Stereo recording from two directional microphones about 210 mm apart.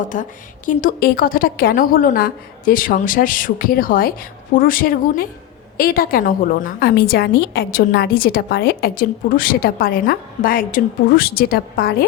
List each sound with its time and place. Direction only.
0.1 s a woman's voice: 40° left (ahead or behind)